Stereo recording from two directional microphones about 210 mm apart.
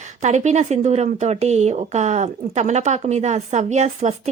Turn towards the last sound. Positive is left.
turn(degrees=-35)  # may be behind; listen again after turning